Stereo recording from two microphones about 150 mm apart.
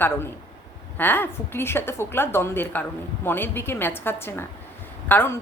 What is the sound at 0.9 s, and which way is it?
A woman's voice, 15° left (ahead or behind).